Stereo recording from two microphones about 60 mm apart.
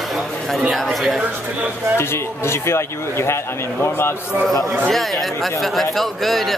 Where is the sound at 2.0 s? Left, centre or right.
Left.